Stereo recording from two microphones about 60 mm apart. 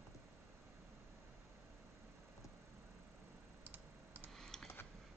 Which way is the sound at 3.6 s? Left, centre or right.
Right.